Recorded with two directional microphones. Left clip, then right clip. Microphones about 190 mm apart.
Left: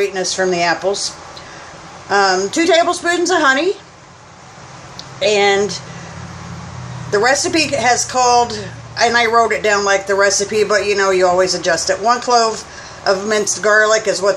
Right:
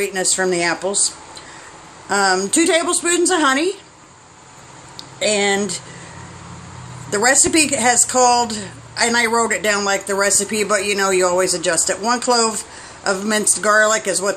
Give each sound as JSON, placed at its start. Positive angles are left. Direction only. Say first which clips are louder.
{"t": 0.0, "sound": "a woman's voice", "louder": "left 2 dB", "side_deg": -50}
{"t": 2.0, "sound": "a woman's voice", "louder": "left 3 dB", "side_deg": -50}
{"t": 5.2, "sound": "a woman's voice", "louder": "left 5 dB", "side_deg": -50}
{"t": 7.1, "sound": "a woman's voice", "louder": "left 2 dB", "side_deg": -50}